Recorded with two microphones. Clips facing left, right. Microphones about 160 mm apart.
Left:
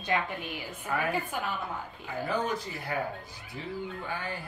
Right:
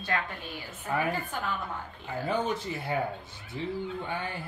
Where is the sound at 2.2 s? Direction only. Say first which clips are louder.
Right 2 dB; 25° right (ahead or behind).